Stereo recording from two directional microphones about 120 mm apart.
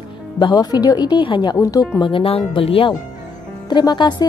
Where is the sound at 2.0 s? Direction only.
45° left (ahead or behind).